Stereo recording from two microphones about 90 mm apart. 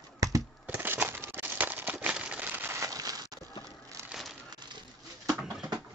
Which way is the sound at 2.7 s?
40° right (ahead or behind).